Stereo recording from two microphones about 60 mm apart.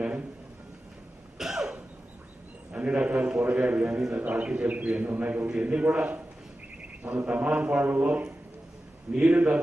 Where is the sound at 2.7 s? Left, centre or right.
Centre.